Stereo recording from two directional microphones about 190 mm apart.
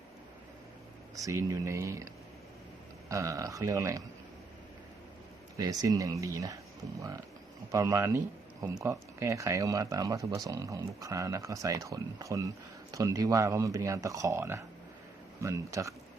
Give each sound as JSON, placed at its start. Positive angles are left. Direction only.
{"t": 1.1, "sound": "speech", "side_deg": -15}
{"t": 3.1, "sound": "speech", "side_deg": -15}
{"t": 5.5, "sound": "speech", "side_deg": -20}
{"t": 7.7, "sound": "speech", "side_deg": -15}